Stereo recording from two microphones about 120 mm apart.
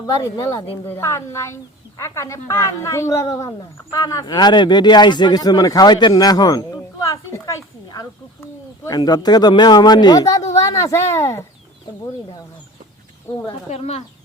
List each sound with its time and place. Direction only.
0.2 s speech: 25° left (ahead or behind)
13.5 s speech: 55° left (ahead or behind)